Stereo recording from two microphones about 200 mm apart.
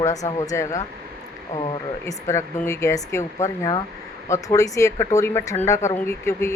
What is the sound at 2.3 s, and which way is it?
Speech, 15° left (ahead or behind).